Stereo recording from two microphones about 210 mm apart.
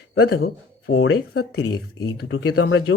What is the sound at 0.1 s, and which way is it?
Speech, 90° left.